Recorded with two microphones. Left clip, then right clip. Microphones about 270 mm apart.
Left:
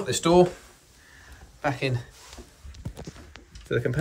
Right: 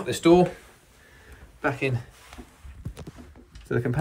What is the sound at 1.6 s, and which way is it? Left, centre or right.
Speech, centre.